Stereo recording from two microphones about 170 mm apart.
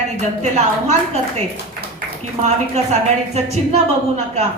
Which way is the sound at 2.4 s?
40° right (ahead or behind).